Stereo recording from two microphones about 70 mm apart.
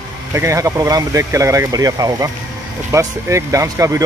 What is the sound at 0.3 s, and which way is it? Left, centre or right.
Speech, right.